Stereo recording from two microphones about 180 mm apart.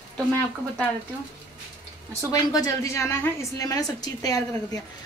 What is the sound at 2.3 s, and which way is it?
A woman's voice, 20° left (ahead or behind).